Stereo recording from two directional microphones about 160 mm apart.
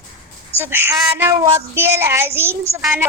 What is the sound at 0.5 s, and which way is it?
Speech, 15° right (ahead or behind).